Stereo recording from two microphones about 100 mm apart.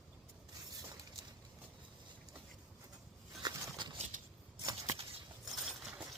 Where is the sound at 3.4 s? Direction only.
45° right (ahead or behind).